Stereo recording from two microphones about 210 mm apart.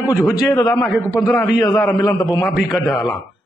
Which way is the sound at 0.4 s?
15° left (ahead or behind).